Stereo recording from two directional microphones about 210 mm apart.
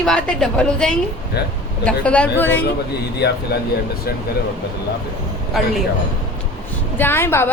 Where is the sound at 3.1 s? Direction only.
50° left (ahead or behind).